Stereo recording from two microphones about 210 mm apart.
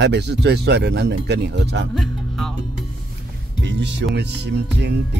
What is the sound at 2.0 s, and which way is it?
Music, centre (ahead or behind).